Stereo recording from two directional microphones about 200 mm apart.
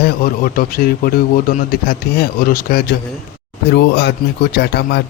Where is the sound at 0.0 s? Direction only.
50° left (ahead or behind).